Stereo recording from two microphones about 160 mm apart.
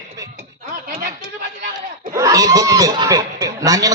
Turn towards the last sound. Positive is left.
turn(degrees=-20)  # may be behind; listen again after turning